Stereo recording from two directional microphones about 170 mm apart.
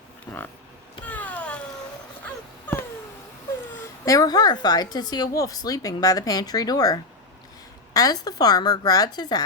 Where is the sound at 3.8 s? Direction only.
20° left (ahead or behind).